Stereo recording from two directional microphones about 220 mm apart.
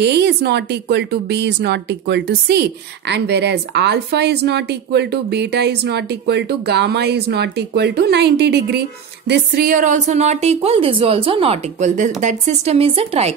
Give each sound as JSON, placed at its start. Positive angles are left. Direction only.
{"t": 0.0, "sound": "a woman's voice", "side_deg": -50}